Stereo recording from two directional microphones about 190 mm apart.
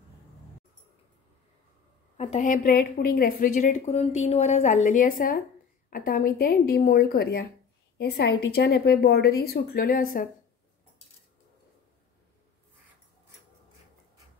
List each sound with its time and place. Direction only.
2.1 s a woman's voice: 40° left (ahead or behind)